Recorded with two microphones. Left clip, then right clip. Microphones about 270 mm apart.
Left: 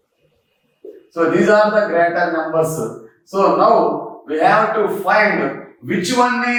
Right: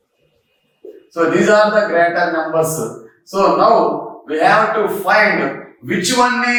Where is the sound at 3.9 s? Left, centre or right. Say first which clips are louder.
Right 1 dB; centre.